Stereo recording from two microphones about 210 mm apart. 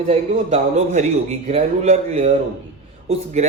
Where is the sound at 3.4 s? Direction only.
30° right (ahead or behind).